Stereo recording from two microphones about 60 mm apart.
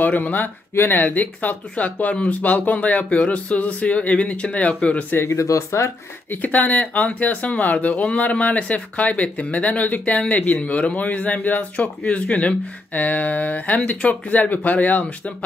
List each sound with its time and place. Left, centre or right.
0.0 s speech: left
5.1 s speech: left
5.4 s speech: left
6.3 s speech: left